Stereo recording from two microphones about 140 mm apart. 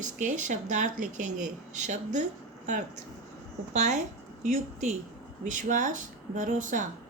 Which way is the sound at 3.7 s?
55° right (ahead or behind).